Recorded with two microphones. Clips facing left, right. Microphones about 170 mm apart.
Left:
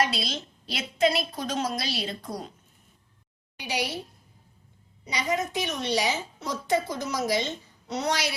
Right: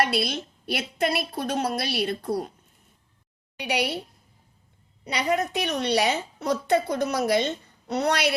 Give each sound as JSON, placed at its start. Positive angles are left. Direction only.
{"t": 0.0, "sound": "a woman's voice", "side_deg": -60}
{"t": 3.6, "sound": "a woman's voice", "side_deg": -65}
{"t": 5.0, "sound": "a woman's voice", "side_deg": -60}